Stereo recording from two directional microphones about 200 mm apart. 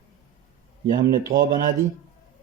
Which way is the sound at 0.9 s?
20° right (ahead or behind).